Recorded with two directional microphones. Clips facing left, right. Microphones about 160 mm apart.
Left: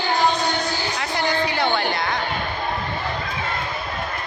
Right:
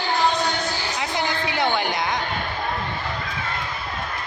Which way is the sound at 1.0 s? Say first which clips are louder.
Left 3 dB; 20° right (ahead or behind).